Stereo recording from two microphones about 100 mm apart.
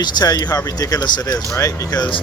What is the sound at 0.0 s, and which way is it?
Speech, 40° left (ahead or behind).